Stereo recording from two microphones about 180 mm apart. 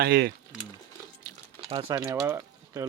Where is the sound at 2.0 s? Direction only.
15° right (ahead or behind).